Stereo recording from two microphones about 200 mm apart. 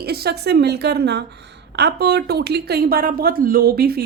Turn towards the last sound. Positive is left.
turn(degrees=-50)  # may be behind; listen again after turning